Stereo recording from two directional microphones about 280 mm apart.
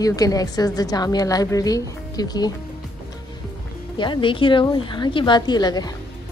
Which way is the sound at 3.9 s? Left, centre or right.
Centre.